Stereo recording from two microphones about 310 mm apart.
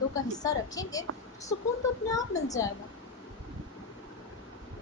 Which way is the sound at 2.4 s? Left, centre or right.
Centre.